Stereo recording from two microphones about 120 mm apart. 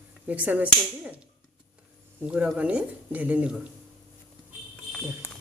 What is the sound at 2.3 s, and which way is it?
Speech, 10° right (ahead or behind).